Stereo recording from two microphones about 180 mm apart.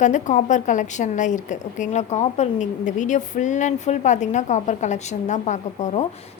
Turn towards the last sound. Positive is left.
turn(degrees=40)  # may be behind; listen again after turning